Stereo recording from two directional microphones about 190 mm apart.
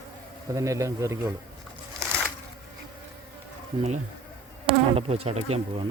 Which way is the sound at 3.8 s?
35° right (ahead or behind).